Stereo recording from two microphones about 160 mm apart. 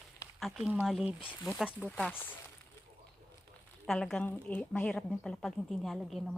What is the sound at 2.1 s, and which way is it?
Speech, 10° left (ahead or behind).